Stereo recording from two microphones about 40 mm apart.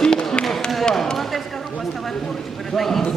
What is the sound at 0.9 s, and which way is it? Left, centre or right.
Basketball bounce, centre.